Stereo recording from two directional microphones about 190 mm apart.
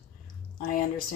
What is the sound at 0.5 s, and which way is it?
Speech, 45° left (ahead or behind).